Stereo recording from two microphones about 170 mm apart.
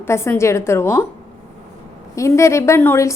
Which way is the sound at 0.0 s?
15° left (ahead or behind).